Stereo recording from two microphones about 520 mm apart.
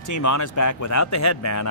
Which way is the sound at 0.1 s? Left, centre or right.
Left.